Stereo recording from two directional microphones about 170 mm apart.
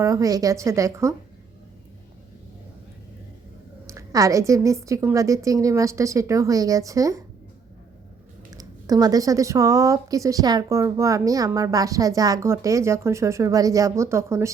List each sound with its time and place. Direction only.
0.0 s speech: 20° right (ahead or behind)
3.8 s speech: 20° right (ahead or behind)
8.5 s speech: 20° right (ahead or behind)